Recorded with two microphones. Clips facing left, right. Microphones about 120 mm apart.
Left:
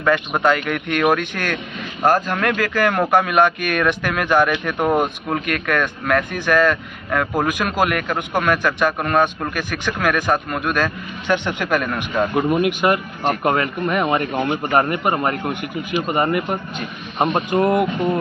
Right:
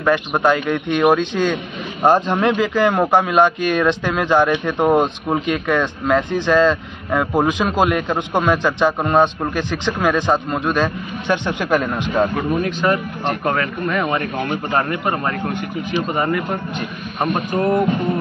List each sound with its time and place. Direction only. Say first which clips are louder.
0.0 s speech: right 1 dB; 15° right (ahead or behind)
12.4 s speech: left 2 dB; 25° left (ahead or behind)
12.8 s speech: even; 10° left (ahead or behind)
16.3 s speech: even; 5° left (ahead or behind)
17.5 s speech: right 2 dB; 15° left (ahead or behind)